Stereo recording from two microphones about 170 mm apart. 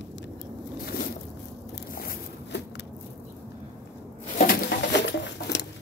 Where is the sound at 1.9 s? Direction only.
60° left (ahead or behind).